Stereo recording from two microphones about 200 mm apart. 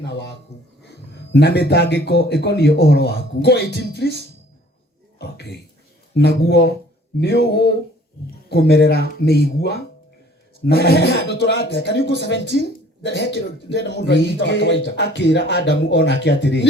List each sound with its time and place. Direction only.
0.0 s a man's voice: 60° left (ahead or behind)
5.2 s a man's voice: 55° left (ahead or behind)